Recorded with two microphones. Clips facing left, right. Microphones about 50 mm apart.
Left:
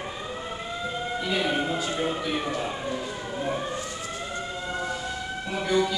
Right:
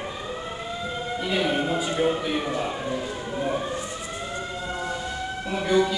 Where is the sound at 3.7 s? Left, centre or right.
Right.